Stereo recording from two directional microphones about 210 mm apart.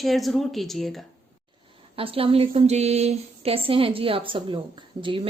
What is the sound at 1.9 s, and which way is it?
Speech, 25° right (ahead or behind).